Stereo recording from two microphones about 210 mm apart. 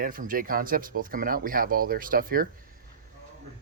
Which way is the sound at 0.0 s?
40° right (ahead or behind).